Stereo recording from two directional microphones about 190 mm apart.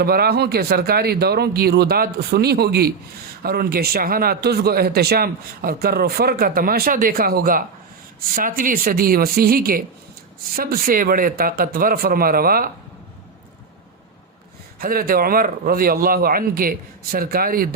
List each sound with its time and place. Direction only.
0.0 s speech: 55° right (ahead or behind)
14.8 s speech: 50° right (ahead or behind)